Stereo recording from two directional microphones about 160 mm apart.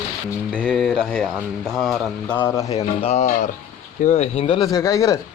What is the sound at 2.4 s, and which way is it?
Speech, 15° left (ahead or behind).